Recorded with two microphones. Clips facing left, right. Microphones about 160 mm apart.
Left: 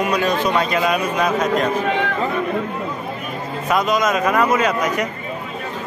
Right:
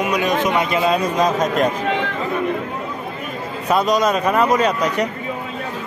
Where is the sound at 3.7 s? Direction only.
35° right (ahead or behind).